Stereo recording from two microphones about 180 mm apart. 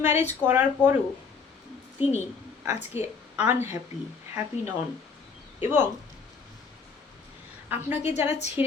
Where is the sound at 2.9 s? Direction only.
15° right (ahead or behind).